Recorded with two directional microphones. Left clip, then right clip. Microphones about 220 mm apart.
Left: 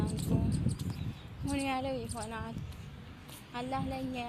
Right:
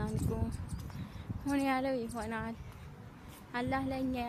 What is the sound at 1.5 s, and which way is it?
Speech, 20° right (ahead or behind).